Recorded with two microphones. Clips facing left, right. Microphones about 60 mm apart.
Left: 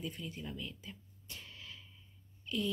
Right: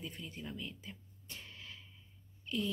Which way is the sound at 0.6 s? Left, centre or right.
Right.